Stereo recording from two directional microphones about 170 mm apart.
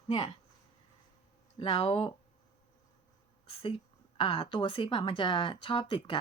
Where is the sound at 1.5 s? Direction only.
35° left (ahead or behind).